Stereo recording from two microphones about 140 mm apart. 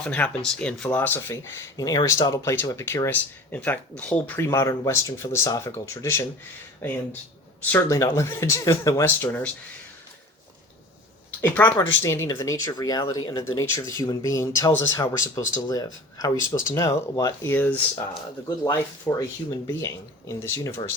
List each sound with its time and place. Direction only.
0.0 s speech: 5° left (ahead or behind)
1.7 s speech: 25° left (ahead or behind)
11.3 s speech: 10° left (ahead or behind)
17.5 s speech: 10° left (ahead or behind)
18.4 s speech: 30° left (ahead or behind)